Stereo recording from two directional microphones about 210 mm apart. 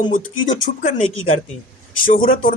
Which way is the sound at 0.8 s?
35° left (ahead or behind).